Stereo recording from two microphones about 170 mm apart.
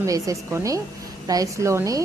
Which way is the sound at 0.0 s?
20° right (ahead or behind).